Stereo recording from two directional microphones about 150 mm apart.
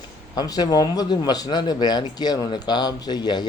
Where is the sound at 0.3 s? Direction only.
25° left (ahead or behind).